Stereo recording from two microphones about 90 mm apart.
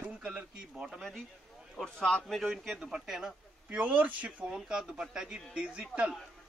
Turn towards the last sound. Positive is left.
turn(degrees=-10)  # may be behind; listen again after turning